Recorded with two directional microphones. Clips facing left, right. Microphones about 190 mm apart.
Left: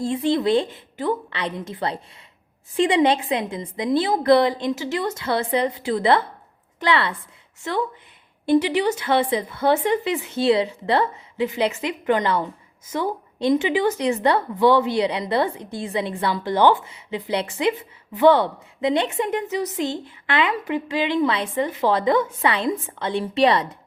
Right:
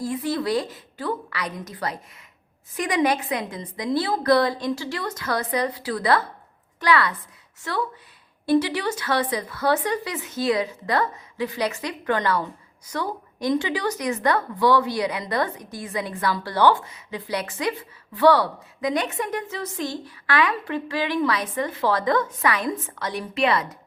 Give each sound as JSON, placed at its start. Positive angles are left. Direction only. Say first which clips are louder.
{"t": 0.0, "sound": "a woman's voice", "louder": "left 5 dB", "side_deg": 25}